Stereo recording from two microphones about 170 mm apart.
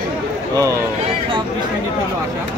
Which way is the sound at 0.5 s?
20° right (ahead or behind).